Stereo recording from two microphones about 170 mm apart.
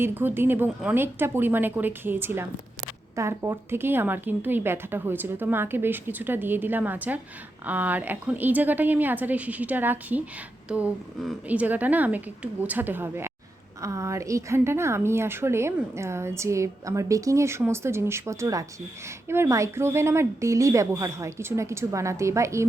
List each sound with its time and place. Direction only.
0.0 s a woman's voice: 10° right (ahead or behind)